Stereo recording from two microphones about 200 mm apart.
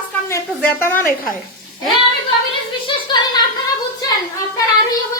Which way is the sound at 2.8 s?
20° left (ahead or behind).